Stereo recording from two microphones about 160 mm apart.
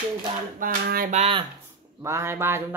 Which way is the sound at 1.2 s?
35° right (ahead or behind).